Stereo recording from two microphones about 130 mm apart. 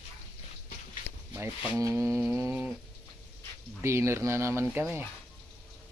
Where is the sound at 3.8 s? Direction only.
20° right (ahead or behind).